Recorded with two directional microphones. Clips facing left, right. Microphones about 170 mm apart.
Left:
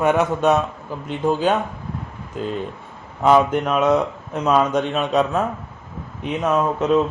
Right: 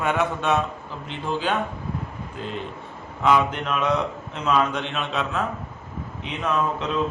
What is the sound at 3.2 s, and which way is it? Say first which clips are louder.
Speech: left 5 dB; 40° left (ahead or behind).